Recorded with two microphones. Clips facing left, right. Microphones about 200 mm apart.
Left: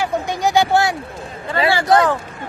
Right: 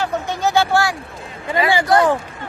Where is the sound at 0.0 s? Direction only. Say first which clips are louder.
Left 1 dB; 15° left (ahead or behind).